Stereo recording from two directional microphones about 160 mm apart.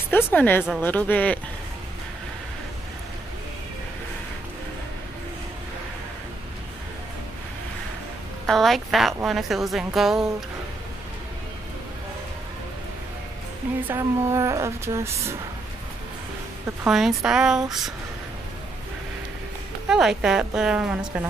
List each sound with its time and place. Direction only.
0.1 s speech: 10° left (ahead or behind)
8.5 s a woman's voice: centre (ahead or behind)
13.8 s speech: 15° right (ahead or behind)
16.8 s a woman's voice: 5° right (ahead or behind)
19.9 s a woman's voice: 5° right (ahead or behind)